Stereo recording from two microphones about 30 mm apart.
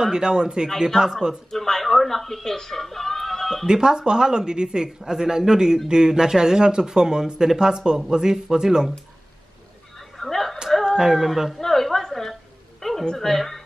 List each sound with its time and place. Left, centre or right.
0.0 s speech: right
0.7 s speech: centre
1.5 s speech: centre
2.8 s a sound: centre
3.6 s speech: right
9.9 s a sound: centre
11.1 s speech: centre
11.5 s a sound: centre
13.2 s speech: centre